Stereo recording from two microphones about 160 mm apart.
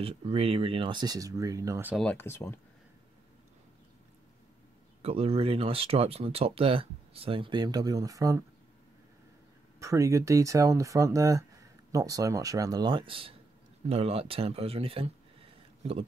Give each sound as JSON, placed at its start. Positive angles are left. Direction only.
{"t": 0.0, "sound": "speech", "side_deg": -35}
{"t": 2.0, "sound": "speech", "side_deg": 10}
{"t": 5.0, "sound": "speech", "side_deg": -40}
{"t": 9.8, "sound": "speech", "side_deg": -20}